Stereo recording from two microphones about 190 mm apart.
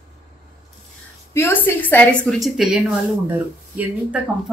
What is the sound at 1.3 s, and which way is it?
A woman's voice, 10° left (ahead or behind).